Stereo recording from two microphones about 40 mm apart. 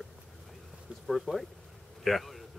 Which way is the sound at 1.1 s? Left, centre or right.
Centre.